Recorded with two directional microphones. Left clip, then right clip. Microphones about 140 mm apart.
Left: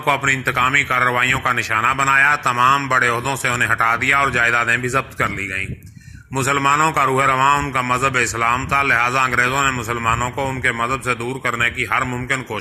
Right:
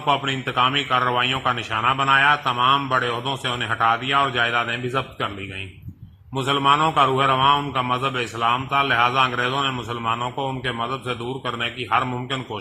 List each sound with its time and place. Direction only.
0.0 s a man's voice: 20° left (ahead or behind)
6.3 s a man's voice: 15° left (ahead or behind)